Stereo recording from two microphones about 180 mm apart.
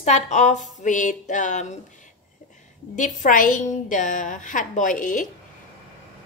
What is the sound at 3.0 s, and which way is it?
A woman's voice, 45° left (ahead or behind).